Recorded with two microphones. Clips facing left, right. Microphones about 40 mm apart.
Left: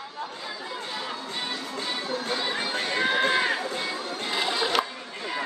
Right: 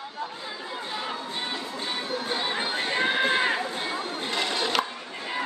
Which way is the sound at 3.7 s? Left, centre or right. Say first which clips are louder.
Even; right.